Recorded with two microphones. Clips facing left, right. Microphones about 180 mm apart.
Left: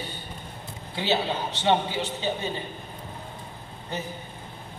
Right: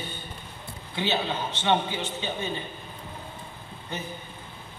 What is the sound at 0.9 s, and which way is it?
A man's voice, 35° left (ahead or behind).